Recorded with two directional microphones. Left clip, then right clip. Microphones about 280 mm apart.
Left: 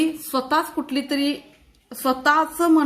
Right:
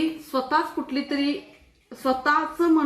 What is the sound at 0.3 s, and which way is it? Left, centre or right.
A woman's voice, left.